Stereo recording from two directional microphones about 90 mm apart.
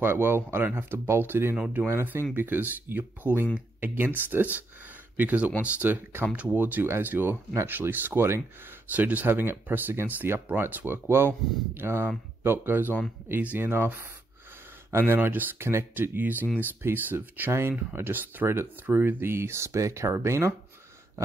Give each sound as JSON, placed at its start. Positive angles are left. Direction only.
{"t": 0.0, "sound": "speech", "side_deg": -25}